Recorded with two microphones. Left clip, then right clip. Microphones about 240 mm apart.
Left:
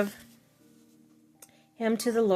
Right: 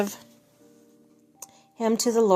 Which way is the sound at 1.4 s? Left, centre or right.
Centre.